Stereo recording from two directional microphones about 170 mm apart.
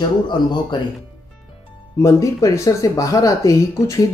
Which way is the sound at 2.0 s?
20° left (ahead or behind).